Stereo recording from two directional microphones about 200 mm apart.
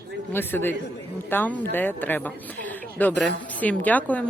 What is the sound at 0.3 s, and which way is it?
Speech, 10° left (ahead or behind).